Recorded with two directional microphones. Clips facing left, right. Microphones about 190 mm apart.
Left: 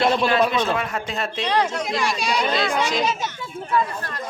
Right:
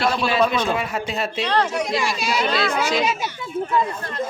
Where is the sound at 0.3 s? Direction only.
Centre (ahead or behind).